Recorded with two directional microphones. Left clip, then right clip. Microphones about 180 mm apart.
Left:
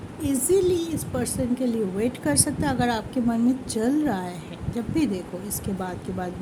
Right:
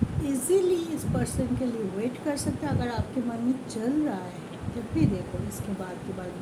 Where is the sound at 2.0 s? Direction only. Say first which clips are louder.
Left 6 dB; 55° left (ahead or behind).